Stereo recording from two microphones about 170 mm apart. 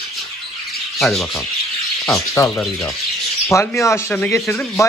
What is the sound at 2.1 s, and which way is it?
Speech, 20° left (ahead or behind).